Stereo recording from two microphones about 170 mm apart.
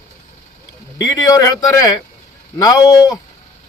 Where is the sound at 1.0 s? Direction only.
20° left (ahead or behind).